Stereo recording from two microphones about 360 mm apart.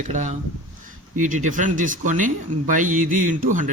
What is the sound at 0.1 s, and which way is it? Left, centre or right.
A man's voice, centre.